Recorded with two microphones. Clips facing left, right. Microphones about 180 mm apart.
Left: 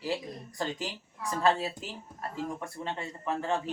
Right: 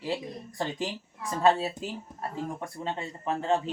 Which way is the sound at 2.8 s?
25° right (ahead or behind).